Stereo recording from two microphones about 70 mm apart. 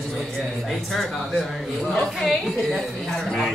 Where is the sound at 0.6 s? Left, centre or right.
Centre.